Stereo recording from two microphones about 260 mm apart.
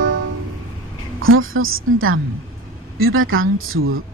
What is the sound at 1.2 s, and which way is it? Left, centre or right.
Speech, right.